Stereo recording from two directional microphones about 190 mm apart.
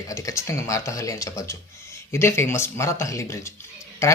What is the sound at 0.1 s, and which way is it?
Speech, 15° left (ahead or behind).